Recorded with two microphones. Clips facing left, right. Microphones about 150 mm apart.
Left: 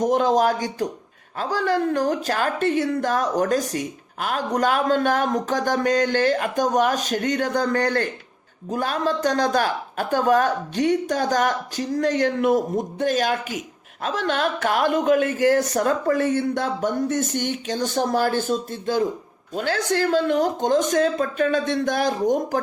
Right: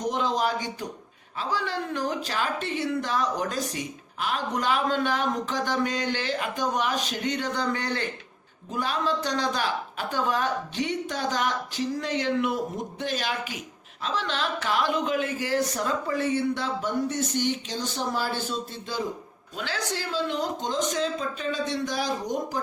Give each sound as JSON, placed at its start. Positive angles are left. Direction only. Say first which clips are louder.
{"t": 0.0, "sound": "a woman's voice", "louder": "left 8 dB", "side_deg": 50}